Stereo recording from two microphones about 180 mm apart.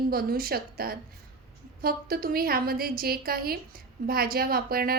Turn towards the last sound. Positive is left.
turn(degrees=-55)  # may be behind; listen again after turning